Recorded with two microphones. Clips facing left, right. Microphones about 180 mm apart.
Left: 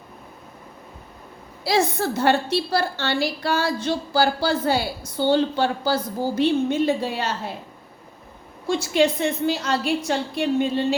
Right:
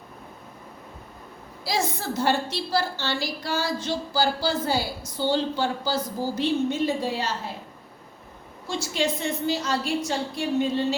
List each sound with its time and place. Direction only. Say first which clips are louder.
1.6 s a woman's voice: left 6 dB; 65° left (ahead or behind)
8.6 s a woman's voice: left 7 dB; 60° left (ahead or behind)